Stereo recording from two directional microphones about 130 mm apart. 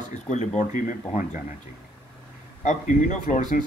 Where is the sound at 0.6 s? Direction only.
85° left.